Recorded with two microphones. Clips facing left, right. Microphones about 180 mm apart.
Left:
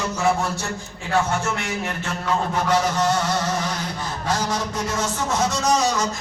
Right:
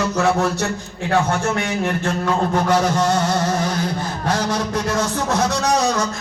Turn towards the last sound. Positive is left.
turn(degrees=-60)  # may be behind; listen again after turning